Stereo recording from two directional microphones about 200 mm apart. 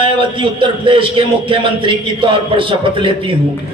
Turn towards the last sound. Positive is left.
turn(degrees=-25)  # may be behind; listen again after turning